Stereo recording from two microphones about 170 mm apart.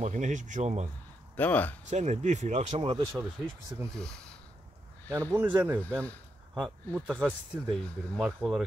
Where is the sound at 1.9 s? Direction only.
45° right (ahead or behind).